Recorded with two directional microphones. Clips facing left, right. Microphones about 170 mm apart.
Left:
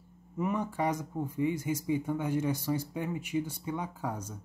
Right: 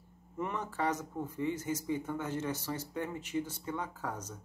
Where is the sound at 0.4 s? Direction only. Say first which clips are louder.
Left 4 dB; 10° left (ahead or behind).